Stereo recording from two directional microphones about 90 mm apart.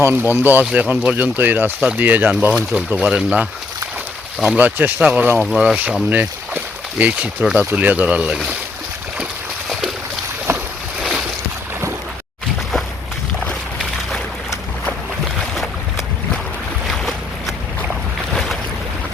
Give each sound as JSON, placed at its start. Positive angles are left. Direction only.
{"t": 0.0, "sound": "speech", "side_deg": -25}
{"t": 4.4, "sound": "speech", "side_deg": -20}
{"t": 7.4, "sound": "speech", "side_deg": -5}
{"t": 7.7, "sound": "speech", "side_deg": -15}
{"t": 15.4, "sound": "boat", "side_deg": 0}
{"t": 16.8, "sound": "boat", "side_deg": 0}